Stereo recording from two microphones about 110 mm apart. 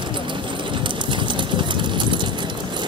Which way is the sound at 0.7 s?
45° right (ahead or behind).